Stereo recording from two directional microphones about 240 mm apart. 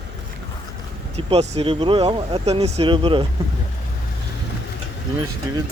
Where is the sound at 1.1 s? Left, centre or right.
Right.